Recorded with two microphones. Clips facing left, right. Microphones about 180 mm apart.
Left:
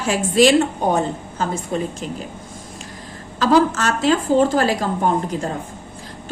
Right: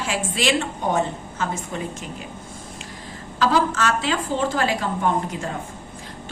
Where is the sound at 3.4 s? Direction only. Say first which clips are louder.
Left 4 dB; 40° left (ahead or behind).